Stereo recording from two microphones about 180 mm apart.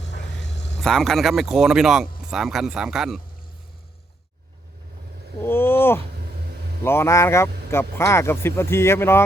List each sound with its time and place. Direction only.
0.0 s vehicle: 75° left (ahead or behind)
0.8 s speech: centre (ahead or behind)
5.4 s speech: 10° left (ahead or behind)